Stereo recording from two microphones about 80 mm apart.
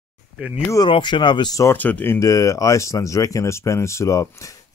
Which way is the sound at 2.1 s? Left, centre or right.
Left.